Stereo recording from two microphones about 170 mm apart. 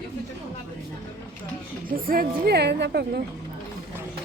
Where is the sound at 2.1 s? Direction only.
65° right (ahead or behind).